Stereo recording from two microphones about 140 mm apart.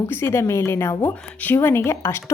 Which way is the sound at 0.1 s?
20° left (ahead or behind).